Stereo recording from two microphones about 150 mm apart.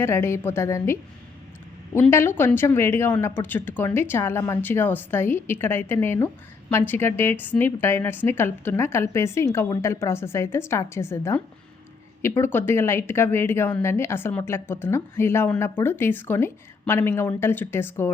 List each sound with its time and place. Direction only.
0.0 s a woman's voice: 15° left (ahead or behind)